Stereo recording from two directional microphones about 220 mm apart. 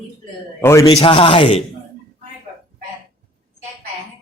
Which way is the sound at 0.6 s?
15° left (ahead or behind).